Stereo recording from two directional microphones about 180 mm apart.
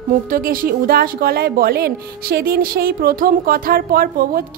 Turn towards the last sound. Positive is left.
turn(degrees=-55)  # may be behind; listen again after turning